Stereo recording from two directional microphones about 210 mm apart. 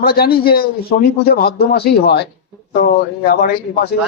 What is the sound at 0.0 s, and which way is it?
A man's voice, 45° left (ahead or behind).